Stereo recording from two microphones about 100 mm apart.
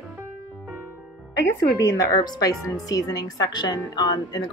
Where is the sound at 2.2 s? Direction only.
40° left (ahead or behind).